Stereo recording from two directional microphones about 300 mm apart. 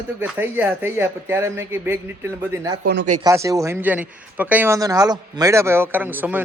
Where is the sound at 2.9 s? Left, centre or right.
Right.